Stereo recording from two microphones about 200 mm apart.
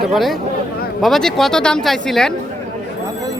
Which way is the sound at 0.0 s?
Centre (ahead or behind).